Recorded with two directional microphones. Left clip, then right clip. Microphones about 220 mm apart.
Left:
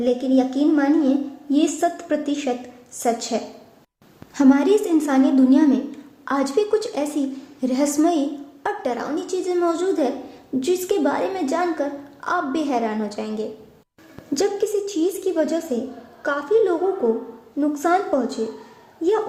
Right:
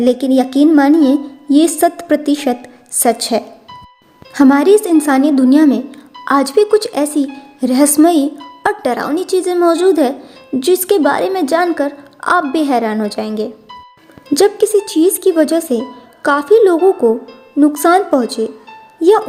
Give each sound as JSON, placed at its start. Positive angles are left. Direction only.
{"t": 0.0, "sound": "a woman's voice", "side_deg": -40}